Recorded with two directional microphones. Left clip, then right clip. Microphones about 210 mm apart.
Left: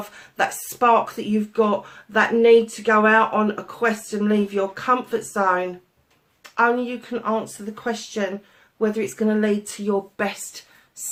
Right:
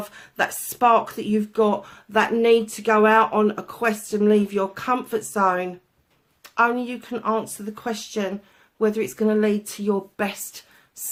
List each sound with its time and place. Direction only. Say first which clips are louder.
0.1 s speech: left 2 dB; 45° right (ahead or behind)